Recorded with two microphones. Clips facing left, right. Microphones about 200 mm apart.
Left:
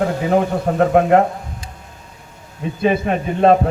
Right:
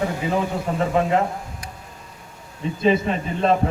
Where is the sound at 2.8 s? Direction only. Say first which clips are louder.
Left 2 dB; 60° left (ahead or behind).